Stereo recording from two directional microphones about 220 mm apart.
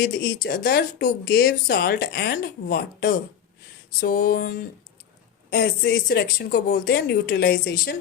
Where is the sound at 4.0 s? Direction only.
40° left (ahead or behind).